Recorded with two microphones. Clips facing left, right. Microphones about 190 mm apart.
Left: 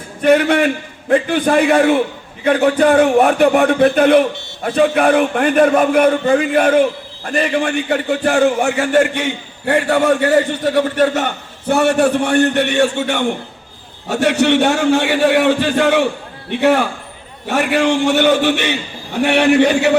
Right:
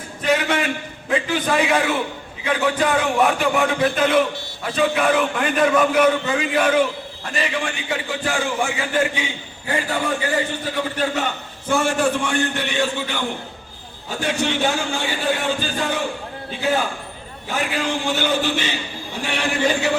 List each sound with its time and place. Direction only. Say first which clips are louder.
0.2 s a man's voice: left 8 dB; 55° left (ahead or behind)